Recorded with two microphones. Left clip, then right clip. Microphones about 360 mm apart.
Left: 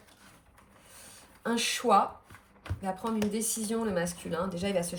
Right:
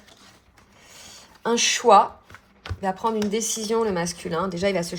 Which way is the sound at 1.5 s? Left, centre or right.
Right.